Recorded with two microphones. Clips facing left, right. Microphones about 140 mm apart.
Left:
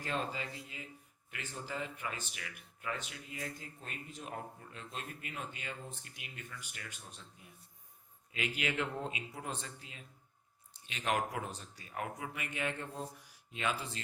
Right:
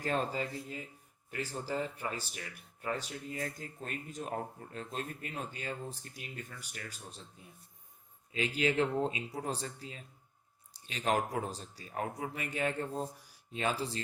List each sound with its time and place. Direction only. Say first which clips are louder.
0.0 s speech: right 5 dB; 40° right (ahead or behind)
8.3 s speech: right 6 dB; 30° right (ahead or behind)